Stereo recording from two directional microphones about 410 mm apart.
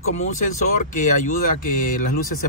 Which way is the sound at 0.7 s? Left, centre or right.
Centre.